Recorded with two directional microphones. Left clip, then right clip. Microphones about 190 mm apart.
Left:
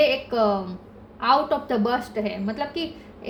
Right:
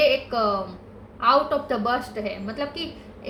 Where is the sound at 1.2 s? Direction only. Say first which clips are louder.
Right 1 dB; 40° left (ahead or behind).